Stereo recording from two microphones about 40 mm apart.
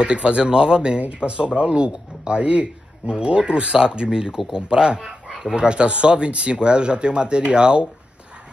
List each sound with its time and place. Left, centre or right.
0.0 s speech: right